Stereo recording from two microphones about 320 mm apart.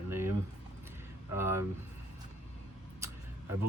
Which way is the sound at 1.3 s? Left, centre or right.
Centre.